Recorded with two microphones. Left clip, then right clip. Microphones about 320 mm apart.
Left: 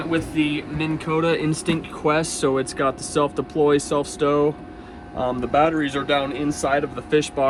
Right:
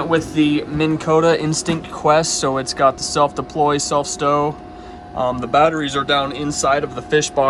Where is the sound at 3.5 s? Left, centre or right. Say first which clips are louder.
Right 2 dB; right.